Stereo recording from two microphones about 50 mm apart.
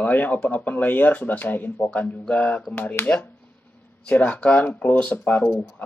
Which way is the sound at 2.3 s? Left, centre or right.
Centre.